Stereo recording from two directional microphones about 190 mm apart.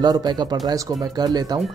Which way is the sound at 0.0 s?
20° right (ahead or behind).